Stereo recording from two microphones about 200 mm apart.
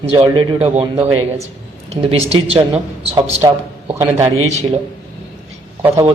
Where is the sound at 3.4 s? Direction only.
15° right (ahead or behind).